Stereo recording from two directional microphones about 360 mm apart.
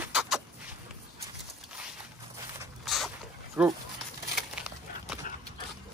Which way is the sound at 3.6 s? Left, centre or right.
Centre.